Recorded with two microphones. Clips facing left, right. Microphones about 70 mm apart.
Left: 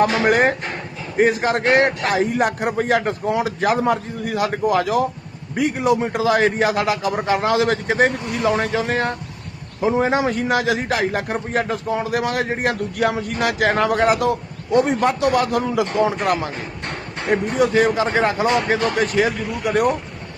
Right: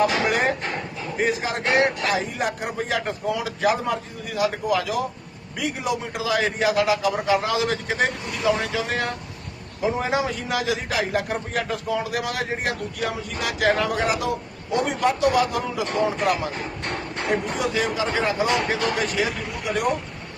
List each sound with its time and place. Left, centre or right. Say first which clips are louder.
0.0 s a man's voice: left 5 dB; left
1.6 s a man's voice: left 2 dB; left
17.6 s a man's voice: left 7 dB; left